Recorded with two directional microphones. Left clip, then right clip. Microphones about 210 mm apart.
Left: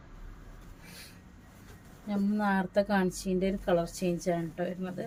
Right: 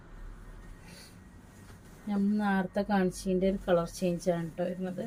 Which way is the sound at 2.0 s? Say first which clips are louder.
Left 1 dB; 20° left (ahead or behind).